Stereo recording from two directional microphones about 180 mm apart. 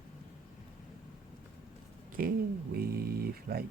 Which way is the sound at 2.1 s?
50° right (ahead or behind).